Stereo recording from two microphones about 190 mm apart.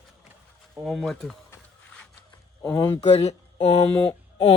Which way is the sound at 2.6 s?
15° left (ahead or behind).